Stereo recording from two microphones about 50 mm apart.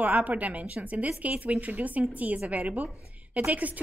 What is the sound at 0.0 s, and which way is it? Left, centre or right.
A woman's voice, right.